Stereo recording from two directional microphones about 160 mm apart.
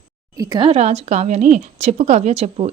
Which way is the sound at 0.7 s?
45° right (ahead or behind).